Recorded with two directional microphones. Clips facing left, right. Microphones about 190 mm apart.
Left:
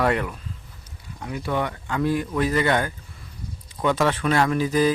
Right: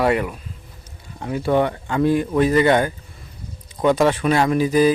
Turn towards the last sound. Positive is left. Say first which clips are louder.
# right 4 dB
turn(degrees=-10)  # may be behind; listen again after turning